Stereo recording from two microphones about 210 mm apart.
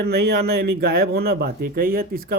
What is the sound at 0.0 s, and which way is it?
Speech, 50° right (ahead or behind).